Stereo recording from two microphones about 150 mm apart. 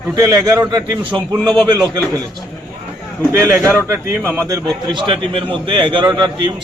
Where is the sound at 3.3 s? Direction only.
20° right (ahead or behind).